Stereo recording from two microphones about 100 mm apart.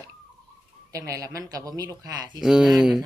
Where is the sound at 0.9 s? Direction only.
30° right (ahead or behind).